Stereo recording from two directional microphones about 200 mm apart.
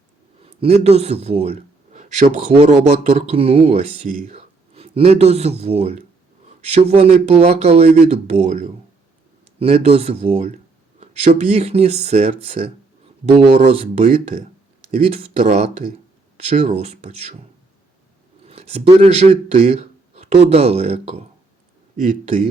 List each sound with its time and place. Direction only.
0.4 s a man's voice: 30° right (ahead or behind)
18.4 s speech: 30° right (ahead or behind)